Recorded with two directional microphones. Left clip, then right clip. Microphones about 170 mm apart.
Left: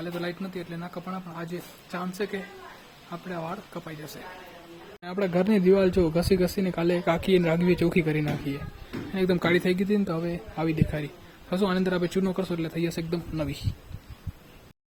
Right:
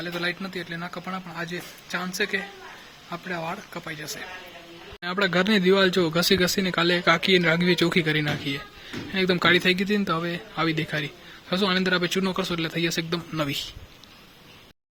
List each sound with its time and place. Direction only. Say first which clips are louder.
0.0 s speech: right 5 dB; 5° left (ahead or behind)